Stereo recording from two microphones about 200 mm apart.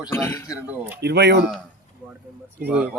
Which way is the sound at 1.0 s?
55° right (ahead or behind).